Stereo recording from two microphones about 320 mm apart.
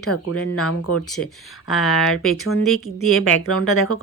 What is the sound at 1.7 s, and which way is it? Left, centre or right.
Speech, centre.